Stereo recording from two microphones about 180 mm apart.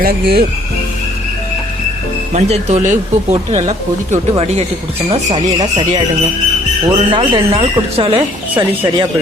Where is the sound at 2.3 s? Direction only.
40° right (ahead or behind).